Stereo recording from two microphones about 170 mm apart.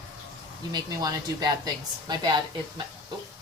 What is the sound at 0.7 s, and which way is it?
A woman's voice, 25° right (ahead or behind).